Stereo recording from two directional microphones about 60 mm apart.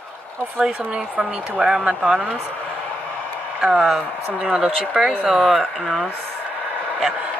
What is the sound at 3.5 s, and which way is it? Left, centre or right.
Speech, centre.